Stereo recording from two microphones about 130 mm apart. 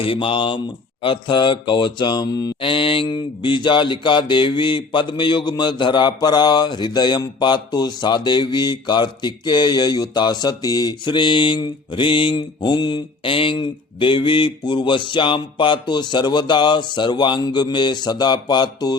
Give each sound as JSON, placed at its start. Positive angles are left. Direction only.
{"t": 0.0, "sound": "mantra", "side_deg": 45}